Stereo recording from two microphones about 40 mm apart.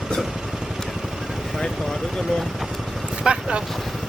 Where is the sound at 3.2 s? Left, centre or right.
Right.